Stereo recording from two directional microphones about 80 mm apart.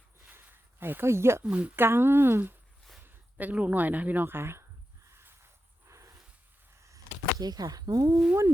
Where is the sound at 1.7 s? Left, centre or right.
Right.